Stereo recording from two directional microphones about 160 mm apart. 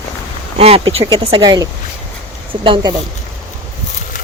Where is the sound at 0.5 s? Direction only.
40° right (ahead or behind).